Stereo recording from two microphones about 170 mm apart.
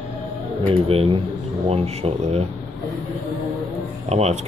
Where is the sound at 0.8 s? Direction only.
35° right (ahead or behind).